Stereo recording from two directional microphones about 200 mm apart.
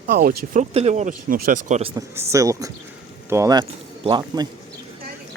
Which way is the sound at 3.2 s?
15° right (ahead or behind).